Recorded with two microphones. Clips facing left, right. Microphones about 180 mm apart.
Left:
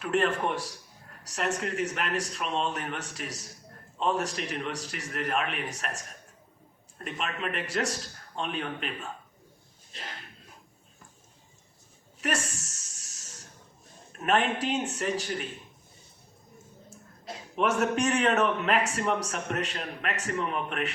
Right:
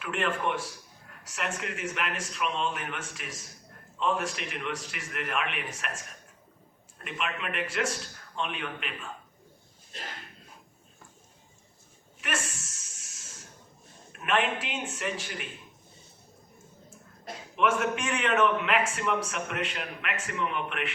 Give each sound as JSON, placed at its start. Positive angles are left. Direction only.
{"t": 0.0, "sound": "speech", "side_deg": 40}
{"t": 7.0, "sound": "speech", "side_deg": 35}
{"t": 12.2, "sound": "a sound", "side_deg": 40}
{"t": 14.2, "sound": "speech", "side_deg": 40}
{"t": 17.5, "sound": "speech", "side_deg": 40}